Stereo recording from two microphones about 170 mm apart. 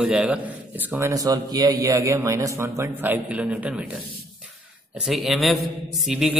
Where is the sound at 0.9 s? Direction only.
15° right (ahead or behind).